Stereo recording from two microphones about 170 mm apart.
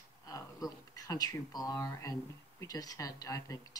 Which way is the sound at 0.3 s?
20° left (ahead or behind).